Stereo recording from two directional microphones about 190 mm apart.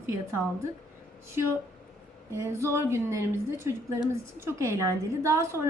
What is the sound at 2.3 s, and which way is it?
Speech, 15° right (ahead or behind).